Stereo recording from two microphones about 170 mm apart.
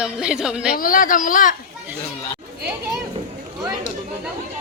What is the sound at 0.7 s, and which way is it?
Speech, 55° left (ahead or behind).